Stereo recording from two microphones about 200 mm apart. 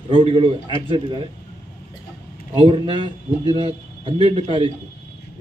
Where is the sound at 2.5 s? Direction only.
25° right (ahead or behind).